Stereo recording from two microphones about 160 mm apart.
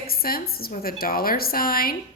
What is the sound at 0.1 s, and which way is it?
A woman's voice, 70° left (ahead or behind).